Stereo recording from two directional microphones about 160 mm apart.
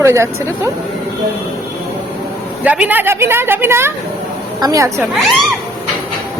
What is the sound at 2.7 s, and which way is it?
A woman's voice, 10° right (ahead or behind).